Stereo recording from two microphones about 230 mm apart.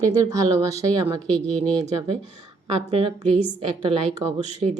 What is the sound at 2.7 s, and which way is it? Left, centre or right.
Speech, right.